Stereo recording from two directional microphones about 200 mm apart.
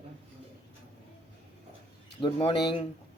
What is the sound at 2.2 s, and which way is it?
Speech, 25° left (ahead or behind).